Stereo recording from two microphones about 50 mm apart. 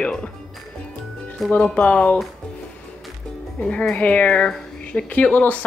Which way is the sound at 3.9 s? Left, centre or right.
Left.